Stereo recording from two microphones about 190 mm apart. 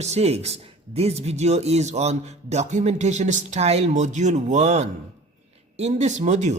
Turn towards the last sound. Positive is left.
turn(degrees=-40)  # may be behind; listen again after turning